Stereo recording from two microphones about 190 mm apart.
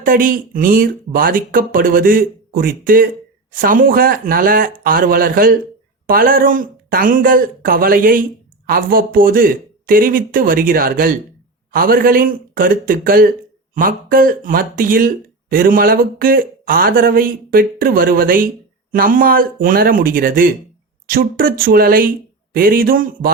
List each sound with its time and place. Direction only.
0.0 s speech: 45° right (ahead or behind)